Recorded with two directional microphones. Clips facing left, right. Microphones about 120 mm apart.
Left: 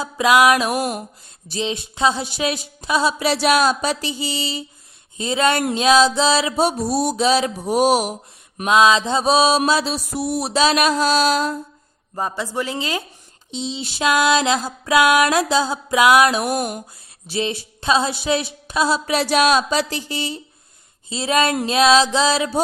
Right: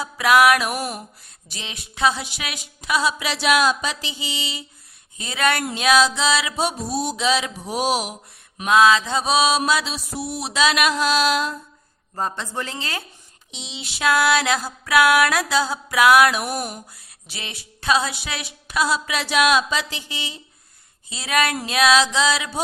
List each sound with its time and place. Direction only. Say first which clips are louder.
0.0 s music: left 1 dB; 20° left (ahead or behind)
1.5 s speech: left 13 dB; 30° left (ahead or behind)
5.1 s music: left 4 dB; 30° left (ahead or behind)
5.7 s speech: left 4 dB; 25° left (ahead or behind)
7.6 s mantra: left 6 dB; 50° left (ahead or behind)
8.6 s music: left 1 dB; 20° left (ahead or behind)
9.6 s speech: left 3 dB; 35° left (ahead or behind)
12.1 s speech: left 3 dB; 10° left (ahead or behind)
13.5 s speech: left 10 dB; 30° left (ahead or behind)
14.1 s music: left 2 dB; 20° left (ahead or behind)
17.3 s speech: left 14 dB; 25° left (ahead or behind)
21.1 s music: left 4 dB; 25° left (ahead or behind)